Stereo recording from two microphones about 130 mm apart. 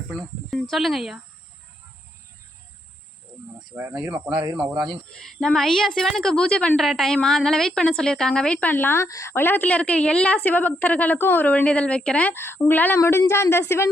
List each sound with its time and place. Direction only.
0.1 s cricket: 5° left (ahead or behind)
0.7 s speech: centre (ahead or behind)
3.8 s speech: 15° right (ahead or behind)
4.5 s a woman's voice: 5° right (ahead or behind); by 13.9 s 20° left (ahead or behind)